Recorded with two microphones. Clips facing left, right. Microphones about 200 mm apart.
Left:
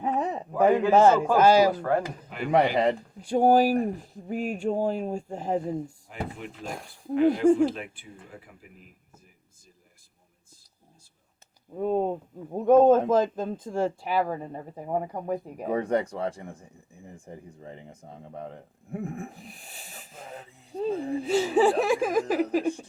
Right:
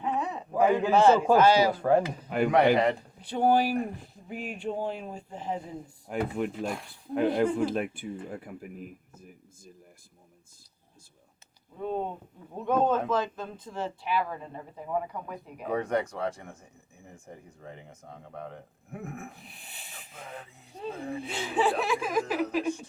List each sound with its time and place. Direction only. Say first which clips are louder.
0.0 s a sound: left 3 dB; 45° left (ahead or behind)
0.6 s speech: left 3 dB; 45° left (ahead or behind)
1.8 s speech: right 3 dB; 20° right (ahead or behind)
2.3 s speech: right 2 dB; 50° right (ahead or behind)
3.2 s speech: left 5 dB; 45° left (ahead or behind)
6.1 s speech: right 6 dB; 50° right (ahead or behind)
6.7 s speech: right 2 dB; 45° left (ahead or behind)
7.6 s speech: left 3 dB; 50° right (ahead or behind)
11.8 s speech: left 6 dB; 40° left (ahead or behind)
19.4 s speech: left 4 dB; 45° left (ahead or behind)
22.6 s speech: left 3 dB; 35° left (ahead or behind)